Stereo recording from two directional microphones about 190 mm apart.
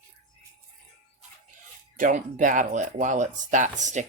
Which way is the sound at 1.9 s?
45° right (ahead or behind).